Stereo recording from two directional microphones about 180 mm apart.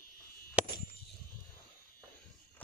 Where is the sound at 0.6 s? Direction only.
5° right (ahead or behind).